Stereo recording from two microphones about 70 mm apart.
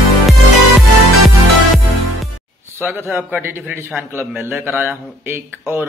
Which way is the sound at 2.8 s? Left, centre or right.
Right.